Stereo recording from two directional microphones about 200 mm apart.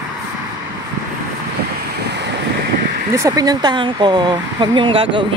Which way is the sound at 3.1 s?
15° right (ahead or behind).